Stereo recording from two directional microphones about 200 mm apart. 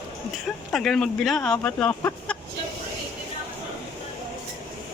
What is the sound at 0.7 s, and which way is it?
Speech, centre (ahead or behind).